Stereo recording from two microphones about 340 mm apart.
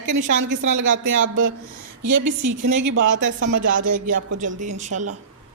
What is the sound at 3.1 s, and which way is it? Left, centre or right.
Speech, right.